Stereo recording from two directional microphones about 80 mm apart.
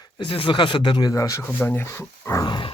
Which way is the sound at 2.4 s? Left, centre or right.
Left.